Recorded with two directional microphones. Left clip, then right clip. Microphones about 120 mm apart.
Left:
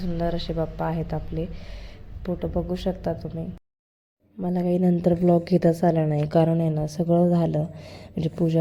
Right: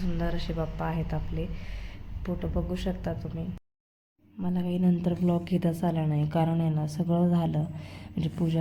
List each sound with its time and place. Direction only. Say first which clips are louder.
0.0 s a woman's voice: left 6 dB; 20° left (ahead or behind)
4.4 s a woman's voice: left 7 dB; 45° left (ahead or behind)
7.0 s speech: left 8 dB; 30° left (ahead or behind)